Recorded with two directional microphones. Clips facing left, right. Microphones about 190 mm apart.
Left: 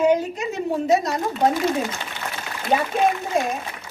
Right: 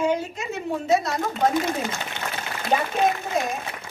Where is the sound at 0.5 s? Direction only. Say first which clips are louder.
Left 2 dB; 40° left (ahead or behind).